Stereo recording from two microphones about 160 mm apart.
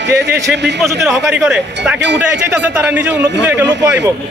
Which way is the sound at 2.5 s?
10° right (ahead or behind).